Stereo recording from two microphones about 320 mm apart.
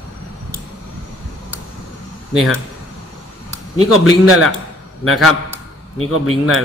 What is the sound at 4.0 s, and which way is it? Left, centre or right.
A man's voice, centre.